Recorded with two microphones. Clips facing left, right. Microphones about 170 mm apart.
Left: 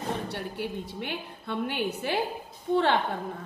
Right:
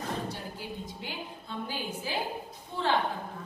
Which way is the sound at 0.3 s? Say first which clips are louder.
Left 6 dB; 65° left (ahead or behind).